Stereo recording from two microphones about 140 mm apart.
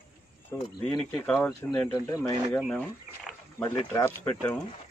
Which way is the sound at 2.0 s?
20° left (ahead or behind).